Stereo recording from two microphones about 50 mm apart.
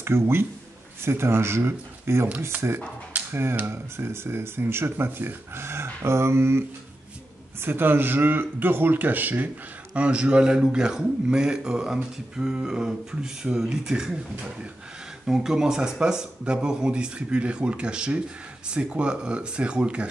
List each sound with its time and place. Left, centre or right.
0.0 s speech: right
3.1 s a sound: right
3.6 s speech: right
7.6 s speech: right
9.9 s a man's voice: right
15.2 s a man's voice: centre